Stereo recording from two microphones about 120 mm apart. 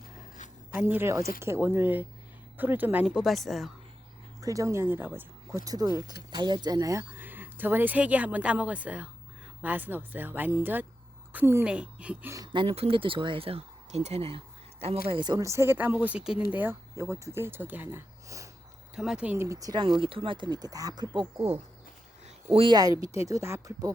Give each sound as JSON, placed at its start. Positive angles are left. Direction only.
{"t": 0.7, "sound": "speech", "side_deg": -15}
{"t": 4.4, "sound": "speech", "side_deg": -25}
{"t": 7.2, "sound": "a woman's voice", "side_deg": -15}
{"t": 12.5, "sound": "speech", "side_deg": -55}
{"t": 15.1, "sound": "speech", "side_deg": -40}
{"t": 15.4, "sound": "speech", "side_deg": -20}
{"t": 16.9, "sound": "speech", "side_deg": -25}
{"t": 19.5, "sound": "speech", "side_deg": -30}
{"t": 20.0, "sound": "speech", "side_deg": -50}
{"t": 22.4, "sound": "speech", "side_deg": -50}
{"t": 22.7, "sound": "speech", "side_deg": -30}